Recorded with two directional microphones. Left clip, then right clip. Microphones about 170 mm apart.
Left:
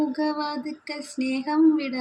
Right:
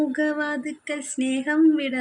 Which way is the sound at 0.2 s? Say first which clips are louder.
Right 2 dB; centre (ahead or behind).